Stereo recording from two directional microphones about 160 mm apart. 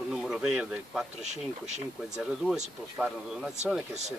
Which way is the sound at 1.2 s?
45° right (ahead or behind).